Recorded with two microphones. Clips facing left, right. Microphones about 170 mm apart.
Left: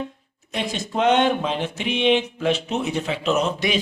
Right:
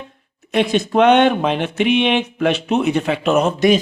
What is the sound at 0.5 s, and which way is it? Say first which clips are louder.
Speech: right 10 dB; 65° right (ahead or behind).